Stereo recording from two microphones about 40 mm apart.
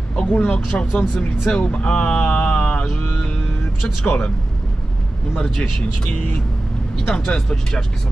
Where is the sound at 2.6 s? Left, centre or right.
Left.